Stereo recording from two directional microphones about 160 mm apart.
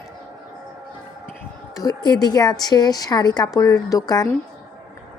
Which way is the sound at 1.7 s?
25° left (ahead or behind).